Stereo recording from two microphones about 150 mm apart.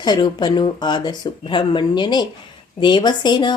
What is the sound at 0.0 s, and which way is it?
Speech, 30° left (ahead or behind).